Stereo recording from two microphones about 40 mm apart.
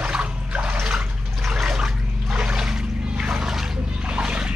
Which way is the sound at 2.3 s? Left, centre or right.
Right.